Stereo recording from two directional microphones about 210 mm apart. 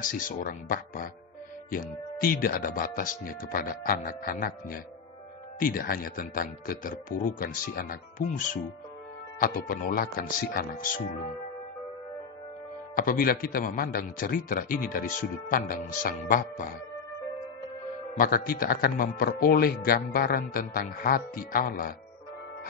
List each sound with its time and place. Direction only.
0.0 s speech: 40° left (ahead or behind)
12.9 s speech: 45° left (ahead or behind)
18.1 s speech: 40° left (ahead or behind)